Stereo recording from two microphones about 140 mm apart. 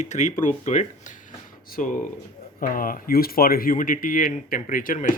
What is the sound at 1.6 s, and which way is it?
Speech, 75° left (ahead or behind).